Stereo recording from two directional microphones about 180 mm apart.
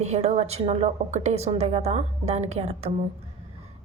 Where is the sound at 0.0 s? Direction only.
35° right (ahead or behind).